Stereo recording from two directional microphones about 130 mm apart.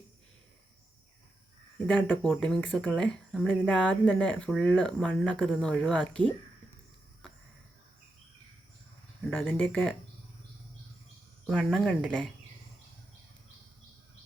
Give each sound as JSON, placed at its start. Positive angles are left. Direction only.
{"t": 1.9, "sound": "speech", "side_deg": 10}
{"t": 9.3, "sound": "speech", "side_deg": 15}
{"t": 11.4, "sound": "speech", "side_deg": 5}